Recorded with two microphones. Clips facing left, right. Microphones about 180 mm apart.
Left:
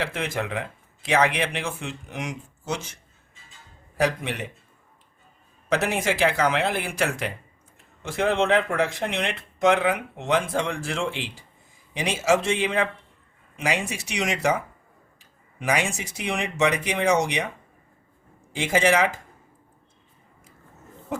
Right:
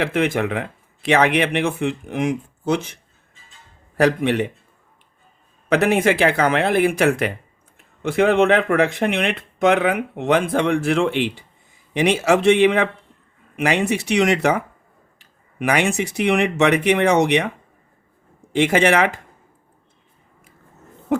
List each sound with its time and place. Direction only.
0.0 s speech: 60° right (ahead or behind)
5.6 s speech: 60° right (ahead or behind)
18.5 s speech: 65° right (ahead or behind)